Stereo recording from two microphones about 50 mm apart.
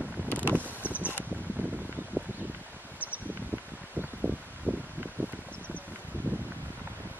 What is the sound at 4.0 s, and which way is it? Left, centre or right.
Rustling leaves, right.